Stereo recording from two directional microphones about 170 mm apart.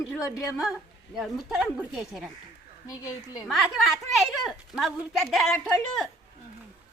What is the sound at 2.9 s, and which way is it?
Speech, 20° left (ahead or behind).